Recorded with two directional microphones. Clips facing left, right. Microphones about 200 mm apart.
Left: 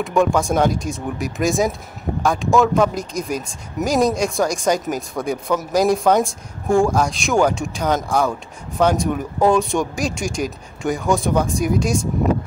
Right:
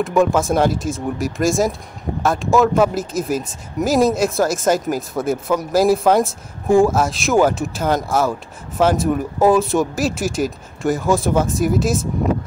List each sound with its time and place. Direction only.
0.0 s speech: centre (ahead or behind)